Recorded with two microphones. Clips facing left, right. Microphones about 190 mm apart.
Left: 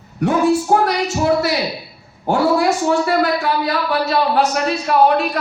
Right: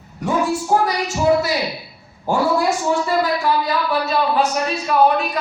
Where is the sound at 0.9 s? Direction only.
65° left (ahead or behind).